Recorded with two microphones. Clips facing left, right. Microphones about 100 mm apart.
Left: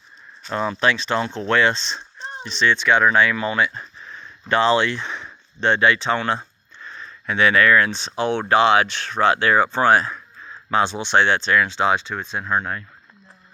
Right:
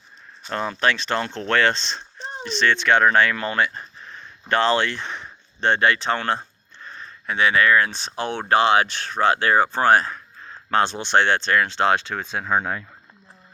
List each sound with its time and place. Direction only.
0.8 s speech: 55° right (ahead or behind)
2.5 s speech: 55° right (ahead or behind); by 7.9 s 30° right (ahead or behind)
7.9 s speech: 45° right (ahead or behind)
8.1 s speech: 20° left (ahead or behind)
8.4 s speech: 40° right (ahead or behind)
10.5 s a sound: 55° right (ahead or behind)
10.8 s speech: 10° left (ahead or behind)
11.1 s speech: 50° right (ahead or behind); by 12.5 s 90° right